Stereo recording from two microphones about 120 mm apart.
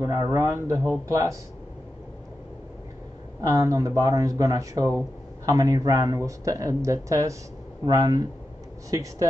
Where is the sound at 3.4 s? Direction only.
25° right (ahead or behind).